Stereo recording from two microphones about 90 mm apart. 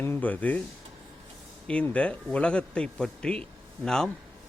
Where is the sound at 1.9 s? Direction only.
15° left (ahead or behind).